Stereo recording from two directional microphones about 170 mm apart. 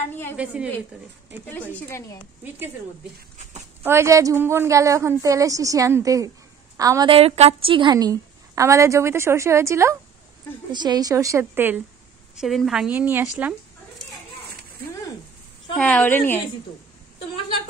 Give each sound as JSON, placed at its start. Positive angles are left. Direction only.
{"t": 0.1, "sound": "a woman's voice", "side_deg": 15}
{"t": 0.4, "sound": "a woman's voice", "side_deg": -5}
{"t": 3.8, "sound": "a woman's voice", "side_deg": -15}
{"t": 7.1, "sound": "a woman's voice", "side_deg": -35}
{"t": 12.4, "sound": "a woman's voice", "side_deg": 0}
{"t": 13.4, "sound": "chicken", "side_deg": -5}
{"t": 15.8, "sound": "a woman's voice", "side_deg": 10}